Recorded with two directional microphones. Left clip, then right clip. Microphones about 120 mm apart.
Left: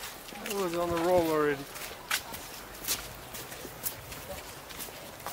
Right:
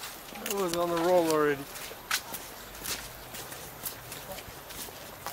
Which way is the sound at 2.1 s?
60° right (ahead or behind).